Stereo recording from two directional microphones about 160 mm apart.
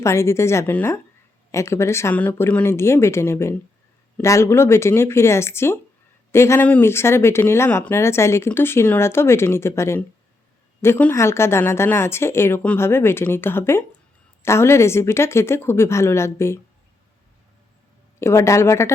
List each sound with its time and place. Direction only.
0.0 s speech: 15° left (ahead or behind)
18.2 s speech: 15° left (ahead or behind)